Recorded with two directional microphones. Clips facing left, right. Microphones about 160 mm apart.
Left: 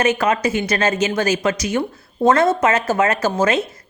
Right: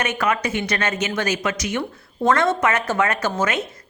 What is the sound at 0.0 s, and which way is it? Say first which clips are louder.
A woman's voice: left 5 dB; 30° left (ahead or behind).